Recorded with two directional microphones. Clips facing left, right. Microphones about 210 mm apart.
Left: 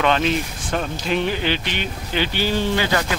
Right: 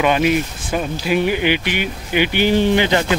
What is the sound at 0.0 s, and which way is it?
Speech, 10° right (ahead or behind).